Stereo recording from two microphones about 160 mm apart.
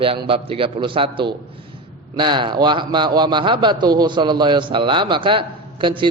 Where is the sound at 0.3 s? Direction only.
35° right (ahead or behind).